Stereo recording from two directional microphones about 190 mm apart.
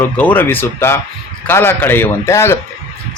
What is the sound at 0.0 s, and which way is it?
A man's voice, 10° left (ahead or behind).